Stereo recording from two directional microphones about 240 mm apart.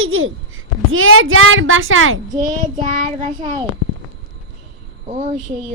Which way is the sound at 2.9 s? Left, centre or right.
Right.